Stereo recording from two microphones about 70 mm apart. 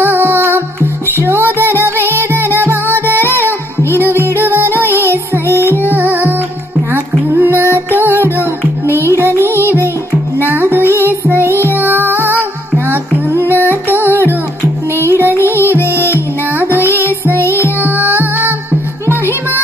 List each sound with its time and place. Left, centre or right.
0.0 s music: right
5.5 s music: left
5.9 s music: right
13.6 s music: left
13.9 s music: right
15.5 s music: left
16.7 s music: right
17.0 s music: left
17.8 s music: right